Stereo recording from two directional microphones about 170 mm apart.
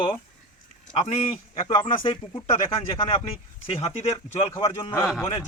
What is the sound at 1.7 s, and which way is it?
Speech, 30° left (ahead or behind).